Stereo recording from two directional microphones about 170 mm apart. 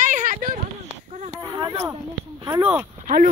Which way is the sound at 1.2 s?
25° right (ahead or behind).